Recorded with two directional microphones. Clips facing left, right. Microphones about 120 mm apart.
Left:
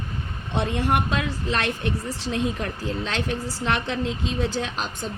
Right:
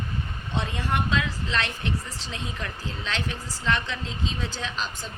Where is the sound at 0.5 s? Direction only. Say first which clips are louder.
Left 5 dB; 60° left (ahead or behind).